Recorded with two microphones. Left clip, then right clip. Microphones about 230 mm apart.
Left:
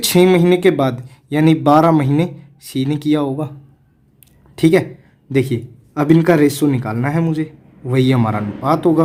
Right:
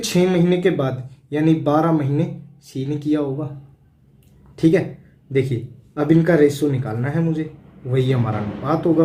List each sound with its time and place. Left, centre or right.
0.0 s speech: left
4.5 s speech: left